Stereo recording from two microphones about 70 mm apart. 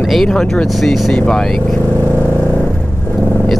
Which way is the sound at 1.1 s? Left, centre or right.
Centre.